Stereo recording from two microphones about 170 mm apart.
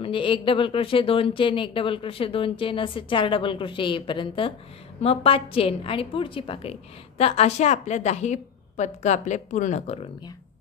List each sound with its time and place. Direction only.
0.0 s a woman's voice: 30° left (ahead or behind)